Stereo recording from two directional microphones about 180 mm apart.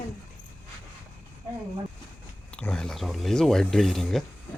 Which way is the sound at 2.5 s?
5° left (ahead or behind).